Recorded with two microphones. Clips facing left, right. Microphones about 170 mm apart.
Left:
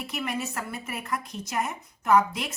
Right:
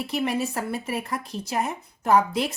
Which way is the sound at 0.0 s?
35° right (ahead or behind).